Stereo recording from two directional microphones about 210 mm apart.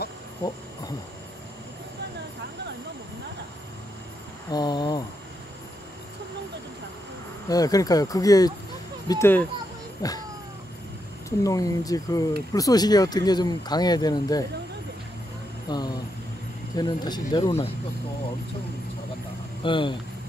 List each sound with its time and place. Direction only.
4.5 s speech: 20° left (ahead or behind)
7.4 s speech: 15° left (ahead or behind)
11.2 s speech: 15° left (ahead or behind)
15.7 s speech: 20° left (ahead or behind)
19.6 s speech: 25° left (ahead or behind)